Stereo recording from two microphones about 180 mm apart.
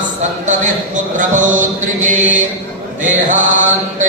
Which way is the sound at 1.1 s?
45° right (ahead or behind).